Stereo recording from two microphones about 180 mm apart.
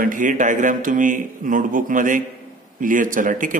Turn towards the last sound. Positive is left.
turn(degrees=-45)  # may be behind; listen again after turning